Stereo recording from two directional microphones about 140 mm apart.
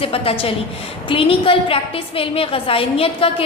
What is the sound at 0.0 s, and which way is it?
A woman's voice, 45° left (ahead or behind).